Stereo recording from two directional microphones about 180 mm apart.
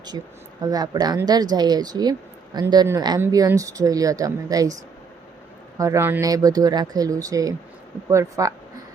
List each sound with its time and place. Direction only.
0.6 s speech: 20° right (ahead or behind)
5.7 s speech: 15° right (ahead or behind)